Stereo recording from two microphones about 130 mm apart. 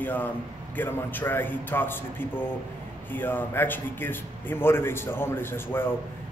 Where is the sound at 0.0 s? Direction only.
15° left (ahead or behind).